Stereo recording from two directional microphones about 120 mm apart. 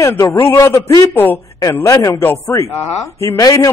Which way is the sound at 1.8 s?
30° left (ahead or behind).